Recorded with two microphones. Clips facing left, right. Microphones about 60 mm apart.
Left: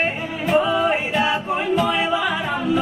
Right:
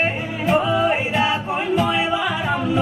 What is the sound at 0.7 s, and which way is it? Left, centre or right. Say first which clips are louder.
Music: right 1 dB; centre.